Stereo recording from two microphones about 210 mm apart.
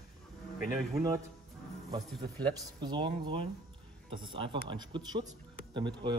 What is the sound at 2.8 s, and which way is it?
Speech, 20° right (ahead or behind).